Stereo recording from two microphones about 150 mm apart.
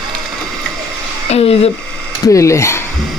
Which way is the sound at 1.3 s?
40° left (ahead or behind).